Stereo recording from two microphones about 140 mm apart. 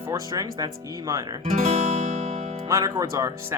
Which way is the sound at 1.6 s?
55° right (ahead or behind).